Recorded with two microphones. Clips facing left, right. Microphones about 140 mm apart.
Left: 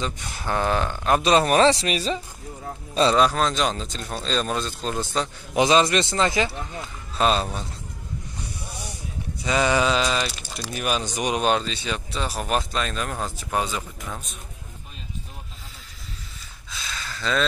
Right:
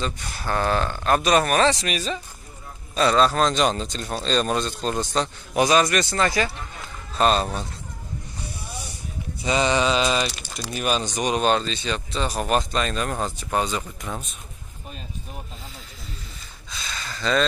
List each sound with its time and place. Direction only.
0.3 s speech: 15° left (ahead or behind)
1.2 s a man's voice: 25° left (ahead or behind)
3.2 s speech: 10° left (ahead or behind)
5.6 s a man's voice: 25° left (ahead or behind)
7.2 s speech: centre (ahead or behind)
9.4 s mantra: 25° right (ahead or behind)
9.8 s mantra: 15° right (ahead or behind)
10.5 s speech: 10° left (ahead or behind)
16.7 s a sound: centre (ahead or behind)